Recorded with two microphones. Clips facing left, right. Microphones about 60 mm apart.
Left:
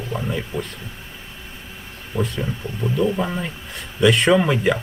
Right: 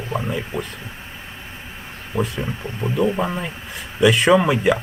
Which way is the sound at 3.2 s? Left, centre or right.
Centre.